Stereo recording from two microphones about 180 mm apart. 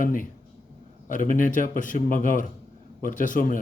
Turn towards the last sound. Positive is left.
turn(degrees=45)  # may be behind; listen again after turning